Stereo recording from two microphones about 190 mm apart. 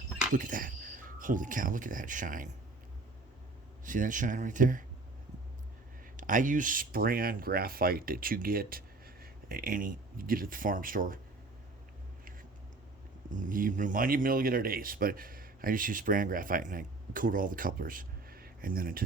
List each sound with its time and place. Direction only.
0.3 s insect: 45° right (ahead or behind)
3.8 s speech: 45° right (ahead or behind)
6.1 s speech: 45° right (ahead or behind)
13.3 s speech: 45° right (ahead or behind)